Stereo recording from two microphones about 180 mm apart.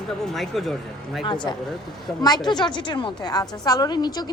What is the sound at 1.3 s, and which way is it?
A woman's voice, 25° left (ahead or behind).